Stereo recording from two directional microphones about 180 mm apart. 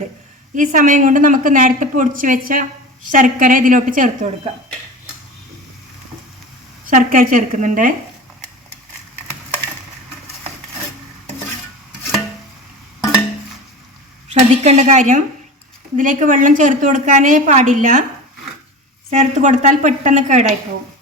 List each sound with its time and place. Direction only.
0.5 s a woman's voice: 45° right (ahead or behind)
6.9 s a woman's voice: 50° right (ahead or behind)
14.3 s a woman's voice: 35° right (ahead or behind)
19.1 s a woman's voice: 40° right (ahead or behind)